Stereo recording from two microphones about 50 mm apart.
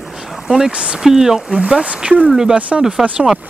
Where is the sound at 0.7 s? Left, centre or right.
Right.